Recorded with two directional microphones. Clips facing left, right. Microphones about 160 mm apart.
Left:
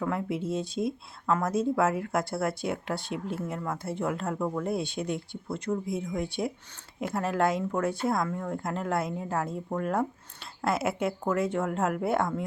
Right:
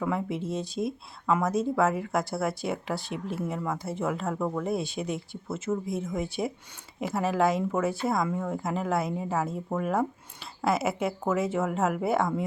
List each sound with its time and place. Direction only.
0.0 s speech: centre (ahead or behind)